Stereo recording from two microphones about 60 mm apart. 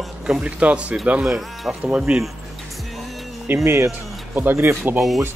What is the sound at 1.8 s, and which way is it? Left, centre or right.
Speech, centre.